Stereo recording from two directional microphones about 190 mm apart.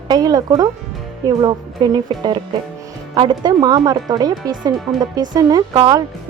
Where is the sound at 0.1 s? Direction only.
20° right (ahead or behind).